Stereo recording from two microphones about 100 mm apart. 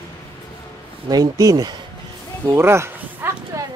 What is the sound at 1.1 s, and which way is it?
Speech, 40° right (ahead or behind).